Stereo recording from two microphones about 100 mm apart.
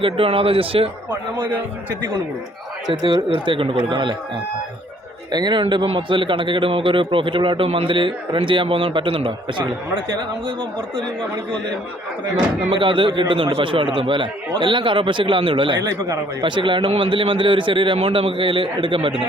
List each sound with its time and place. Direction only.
0.0 s speech: 65° right (ahead or behind)
2.8 s a man's voice: 50° right (ahead or behind)
5.3 s a man's voice: 45° right (ahead or behind); by 11.0 s 60° right (ahead or behind)
12.7 s a man's voice: 55° right (ahead or behind)
15.8 s a man's voice: 35° right (ahead or behind)
16.4 s a man's voice: 55° right (ahead or behind)